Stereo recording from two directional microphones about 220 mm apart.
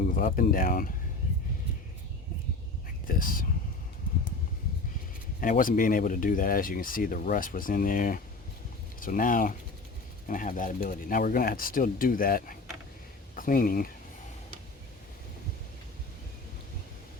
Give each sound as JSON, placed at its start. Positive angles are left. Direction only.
{"t": 0.1, "sound": "speech", "side_deg": 40}
{"t": 3.1, "sound": "speech", "side_deg": 40}
{"t": 5.4, "sound": "speech", "side_deg": 40}